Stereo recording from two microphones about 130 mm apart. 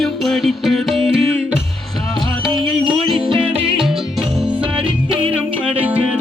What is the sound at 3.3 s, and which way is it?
Music, 40° right (ahead or behind).